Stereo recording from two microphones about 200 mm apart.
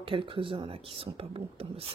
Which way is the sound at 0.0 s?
25° right (ahead or behind).